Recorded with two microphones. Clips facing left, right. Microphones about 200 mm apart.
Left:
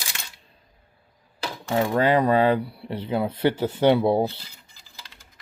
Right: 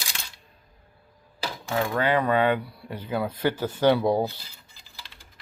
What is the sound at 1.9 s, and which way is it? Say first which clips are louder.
Speech: left 4 dB; 35° left (ahead or behind).